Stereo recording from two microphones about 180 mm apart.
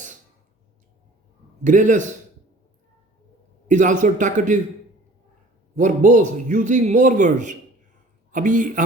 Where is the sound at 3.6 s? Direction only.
45° right (ahead or behind).